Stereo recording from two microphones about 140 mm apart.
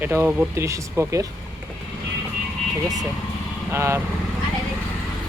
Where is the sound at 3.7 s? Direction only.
20° right (ahead or behind).